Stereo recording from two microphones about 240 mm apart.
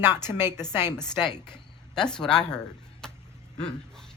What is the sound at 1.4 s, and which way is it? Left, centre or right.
Speech, centre.